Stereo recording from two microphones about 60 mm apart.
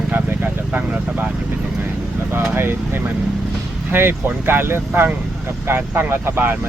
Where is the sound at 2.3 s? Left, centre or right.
Right.